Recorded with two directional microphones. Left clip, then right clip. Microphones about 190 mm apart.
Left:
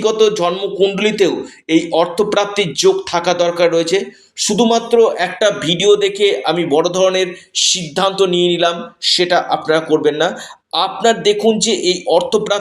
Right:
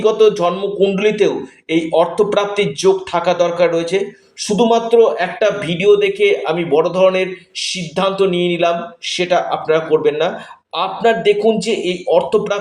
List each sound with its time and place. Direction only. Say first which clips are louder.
0.0 s speech: right 1 dB; 40° left (ahead or behind)